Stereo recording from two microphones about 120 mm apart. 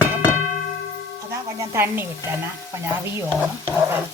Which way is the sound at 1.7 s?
20° right (ahead or behind).